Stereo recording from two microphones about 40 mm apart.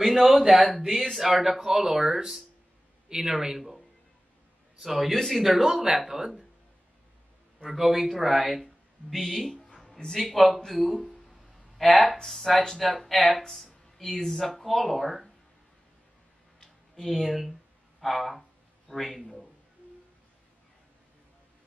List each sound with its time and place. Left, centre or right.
0.0 s a man's voice: centre
4.8 s speech: centre
5.1 s speech: centre
5.4 s speech: centre
7.6 s speech: centre
9.1 s speech: centre
10.8 s a sound: centre
11.8 s speech: centre
17.0 s speech: centre
17.3 s speech: centre
19.2 s a man's voice: centre